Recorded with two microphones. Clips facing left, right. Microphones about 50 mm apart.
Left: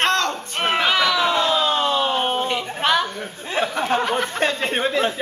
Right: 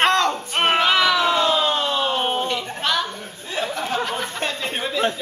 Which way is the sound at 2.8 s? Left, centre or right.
Left.